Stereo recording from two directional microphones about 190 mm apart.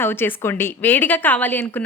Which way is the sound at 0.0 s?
10° left (ahead or behind).